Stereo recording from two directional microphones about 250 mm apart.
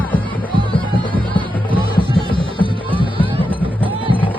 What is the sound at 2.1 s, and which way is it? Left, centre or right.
Music, centre.